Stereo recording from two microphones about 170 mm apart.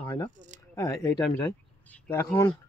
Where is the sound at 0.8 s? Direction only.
20° left (ahead or behind).